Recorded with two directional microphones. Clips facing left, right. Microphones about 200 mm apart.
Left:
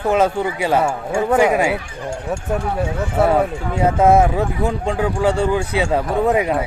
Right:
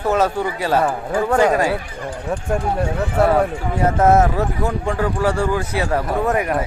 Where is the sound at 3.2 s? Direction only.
Centre (ahead or behind).